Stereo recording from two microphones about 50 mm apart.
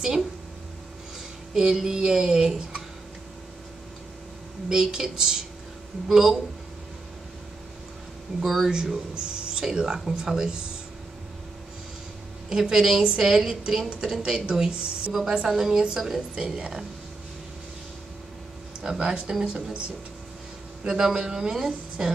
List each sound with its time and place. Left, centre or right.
0.0 s speech: centre
1.5 s speech: centre
4.6 s speech: centre
8.4 s speech: centre
12.4 s speech: centre
16.4 s speech: right
18.8 s speech: centre
20.8 s speech: centre